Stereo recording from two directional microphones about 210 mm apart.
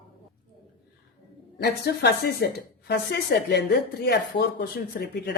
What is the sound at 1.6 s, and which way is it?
Speech, 50° left (ahead or behind).